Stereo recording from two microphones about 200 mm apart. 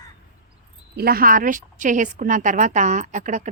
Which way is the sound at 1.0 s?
50° right (ahead or behind).